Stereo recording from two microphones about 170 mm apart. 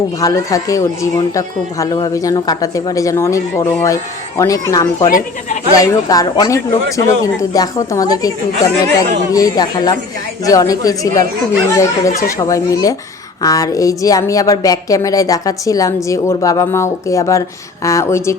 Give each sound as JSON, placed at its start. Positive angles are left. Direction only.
{"t": 0.2, "sound": "speech", "side_deg": 20}